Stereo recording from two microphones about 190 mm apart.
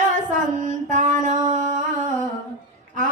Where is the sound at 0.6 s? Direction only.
40° right (ahead or behind).